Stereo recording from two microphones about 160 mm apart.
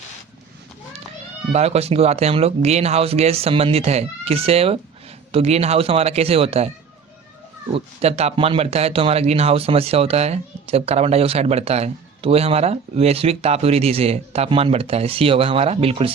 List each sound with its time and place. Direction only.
1.5 s speech: 40° right (ahead or behind)
7.7 s speech: 40° right (ahead or behind)